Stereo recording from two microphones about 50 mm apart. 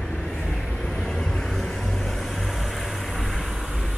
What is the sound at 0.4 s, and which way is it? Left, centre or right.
Vehicle, centre.